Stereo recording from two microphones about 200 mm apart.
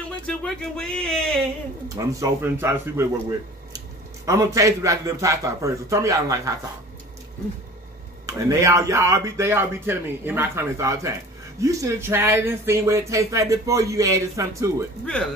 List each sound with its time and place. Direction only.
0.3 s speech: 5° left (ahead or behind)
2.0 s speech: 15° right (ahead or behind)
8.3 s speech: 15° right (ahead or behind)